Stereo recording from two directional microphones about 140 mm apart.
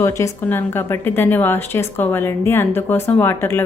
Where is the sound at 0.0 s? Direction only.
20° left (ahead or behind).